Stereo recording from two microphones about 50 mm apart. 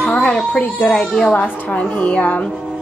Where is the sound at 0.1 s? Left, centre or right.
Left.